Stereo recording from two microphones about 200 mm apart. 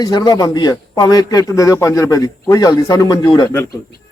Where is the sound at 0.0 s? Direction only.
20° left (ahead or behind).